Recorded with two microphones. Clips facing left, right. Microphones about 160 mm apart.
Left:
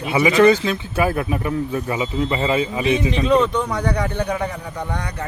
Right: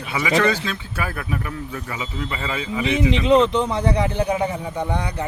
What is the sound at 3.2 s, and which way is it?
Speech, 25° right (ahead or behind).